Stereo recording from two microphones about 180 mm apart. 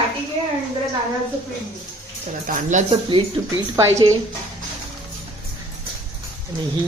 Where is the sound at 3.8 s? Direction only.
15° right (ahead or behind).